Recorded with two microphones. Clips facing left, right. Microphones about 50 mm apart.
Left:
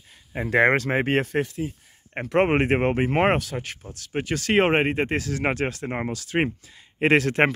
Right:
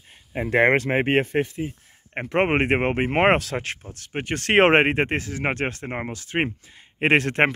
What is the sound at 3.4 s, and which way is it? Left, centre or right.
Speech, right.